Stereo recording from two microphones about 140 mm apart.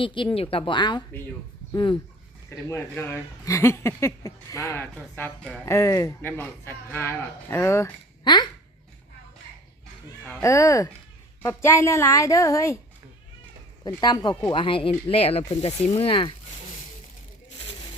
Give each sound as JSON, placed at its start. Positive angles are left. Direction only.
{"t": 0.0, "sound": "speech", "side_deg": 35}
{"t": 2.6, "sound": "speech", "side_deg": 20}
{"t": 4.9, "sound": "a woman's voice", "side_deg": 10}
{"t": 8.2, "sound": "speech", "side_deg": 30}
{"t": 10.4, "sound": "speech", "side_deg": 25}
{"t": 13.8, "sound": "speech", "side_deg": 30}